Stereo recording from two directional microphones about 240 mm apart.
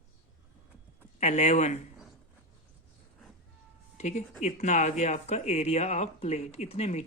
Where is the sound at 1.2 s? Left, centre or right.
Left.